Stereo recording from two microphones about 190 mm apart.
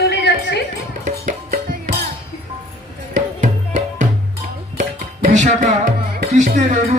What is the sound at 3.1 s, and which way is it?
Music, 40° right (ahead or behind).